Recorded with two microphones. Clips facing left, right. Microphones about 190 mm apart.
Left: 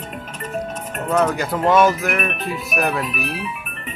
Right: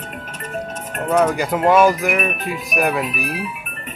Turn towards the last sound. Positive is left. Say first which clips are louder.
# right 2 dB
turn(degrees=-10)  # may be behind; listen again after turning